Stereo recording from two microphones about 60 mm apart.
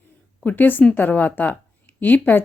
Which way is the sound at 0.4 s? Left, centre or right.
Left.